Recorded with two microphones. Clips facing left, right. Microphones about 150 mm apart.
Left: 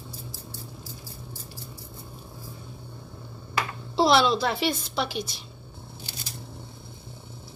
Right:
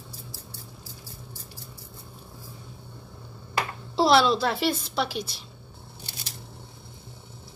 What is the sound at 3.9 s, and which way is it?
A woman's voice, centre (ahead or behind).